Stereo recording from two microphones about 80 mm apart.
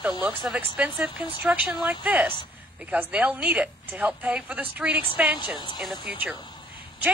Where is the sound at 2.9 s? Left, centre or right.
Centre.